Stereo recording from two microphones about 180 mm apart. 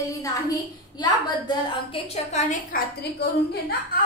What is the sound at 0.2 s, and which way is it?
A woman's voice, 20° left (ahead or behind).